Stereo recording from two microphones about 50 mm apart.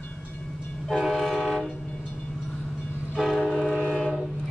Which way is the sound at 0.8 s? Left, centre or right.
Centre.